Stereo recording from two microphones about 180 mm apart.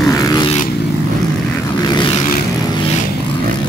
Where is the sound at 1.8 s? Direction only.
25° left (ahead or behind).